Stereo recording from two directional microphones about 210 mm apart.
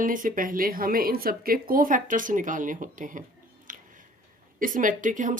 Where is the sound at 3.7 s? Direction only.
40° right (ahead or behind).